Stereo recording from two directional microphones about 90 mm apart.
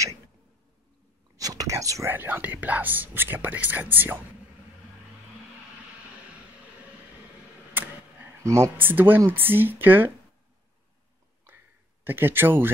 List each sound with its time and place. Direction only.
1.3 s whispering: 40° right (ahead or behind)
2.0 s speech: 20° right (ahead or behind)
7.7 s a sound: 20° right (ahead or behind)
8.5 s speech: 35° right (ahead or behind)
8.7 s speech: 20° right (ahead or behind)
11.4 s a sound: 25° right (ahead or behind)